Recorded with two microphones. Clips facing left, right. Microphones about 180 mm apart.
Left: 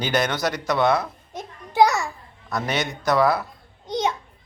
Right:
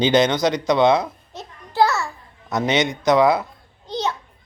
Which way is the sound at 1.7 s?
15° left (ahead or behind).